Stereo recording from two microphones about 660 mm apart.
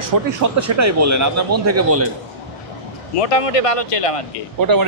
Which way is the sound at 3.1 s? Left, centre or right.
Left.